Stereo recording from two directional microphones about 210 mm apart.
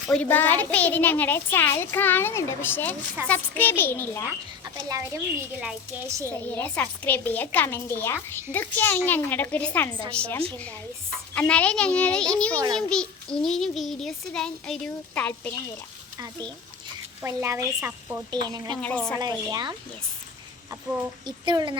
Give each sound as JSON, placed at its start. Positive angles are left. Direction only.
{"t": 0.1, "sound": "a woman's voice", "side_deg": 10}
{"t": 4.6, "sound": "a woman's voice", "side_deg": -15}
{"t": 6.4, "sound": "a woman's voice", "side_deg": 10}
{"t": 16.1, "sound": "a woman's voice", "side_deg": -15}
{"t": 18.8, "sound": "a woman's voice", "side_deg": 5}
{"t": 19.5, "sound": "speech", "side_deg": -20}
{"t": 21.2, "sound": "speech", "side_deg": -20}